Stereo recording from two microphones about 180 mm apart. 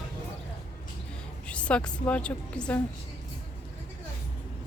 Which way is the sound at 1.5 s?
5° left (ahead or behind).